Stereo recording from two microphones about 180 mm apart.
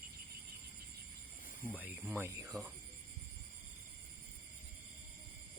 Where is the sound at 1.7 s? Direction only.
10° right (ahead or behind).